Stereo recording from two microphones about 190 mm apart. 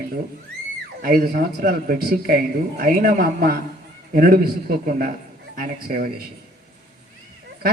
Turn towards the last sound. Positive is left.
turn(degrees=-50)  # may be behind; listen again after turning